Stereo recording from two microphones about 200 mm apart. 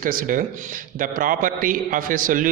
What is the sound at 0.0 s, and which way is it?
A man's voice, 45° right (ahead or behind).